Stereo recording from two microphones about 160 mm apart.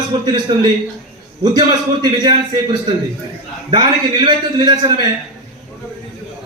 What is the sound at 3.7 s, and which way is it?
A man's voice, 30° right (ahead or behind).